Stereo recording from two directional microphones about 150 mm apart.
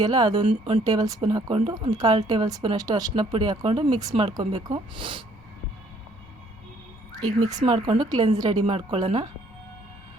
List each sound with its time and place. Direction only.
0.0 s a woman's voice: 25° right (ahead or behind)
1.9 s speech: 25° right (ahead or behind)
7.2 s a woman's voice: 25° right (ahead or behind)